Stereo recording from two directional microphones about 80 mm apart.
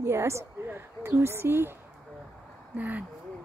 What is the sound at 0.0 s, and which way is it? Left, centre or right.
Speech, right.